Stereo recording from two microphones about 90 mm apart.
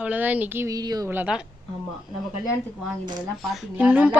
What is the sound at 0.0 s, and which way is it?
Speech, 20° right (ahead or behind).